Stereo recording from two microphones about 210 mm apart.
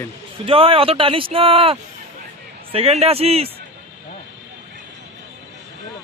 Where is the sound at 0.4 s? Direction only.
25° right (ahead or behind).